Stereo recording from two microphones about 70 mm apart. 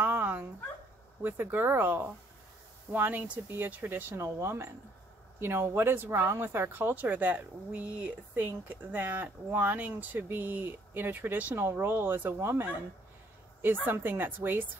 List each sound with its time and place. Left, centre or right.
0.0 s dog: right
1.2 s speech: right
13.8 s speech: right